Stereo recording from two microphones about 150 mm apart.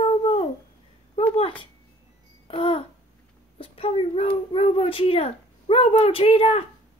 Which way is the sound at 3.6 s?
40° left (ahead or behind).